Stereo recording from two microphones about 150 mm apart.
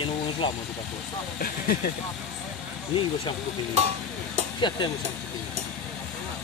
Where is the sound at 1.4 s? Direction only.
75° left (ahead or behind).